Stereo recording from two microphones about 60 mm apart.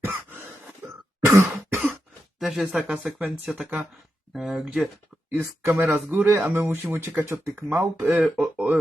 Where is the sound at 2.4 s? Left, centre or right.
Centre.